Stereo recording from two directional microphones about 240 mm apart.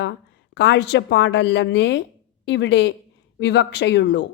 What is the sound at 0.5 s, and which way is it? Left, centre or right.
A woman's voice, left.